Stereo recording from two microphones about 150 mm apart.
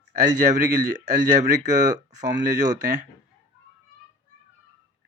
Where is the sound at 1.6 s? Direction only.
55° right (ahead or behind).